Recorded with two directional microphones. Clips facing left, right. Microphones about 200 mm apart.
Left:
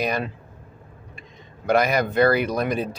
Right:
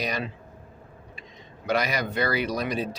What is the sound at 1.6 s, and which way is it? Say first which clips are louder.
Speech: left 6 dB; 50° left (ahead or behind).